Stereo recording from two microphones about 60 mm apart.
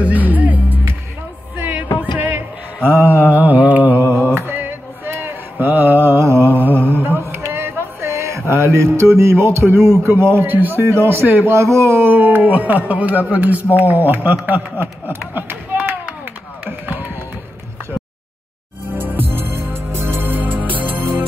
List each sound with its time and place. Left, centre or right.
0.0 s music: right
2.0 s mantra: right
6.1 s mantra: right
6.5 s mantra: right
10.8 s speech: right
11.2 s a man's voice: right
11.5 s speech: right
12.2 s speech: right
16.6 s music: right
18.9 s music: right